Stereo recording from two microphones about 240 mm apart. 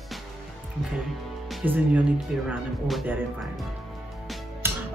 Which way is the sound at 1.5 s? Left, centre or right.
Centre.